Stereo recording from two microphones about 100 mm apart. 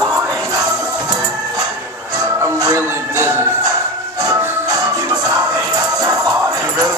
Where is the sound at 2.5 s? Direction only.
40° right (ahead or behind).